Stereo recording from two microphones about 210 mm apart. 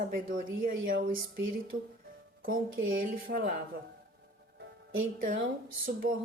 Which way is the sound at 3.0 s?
45° right (ahead or behind).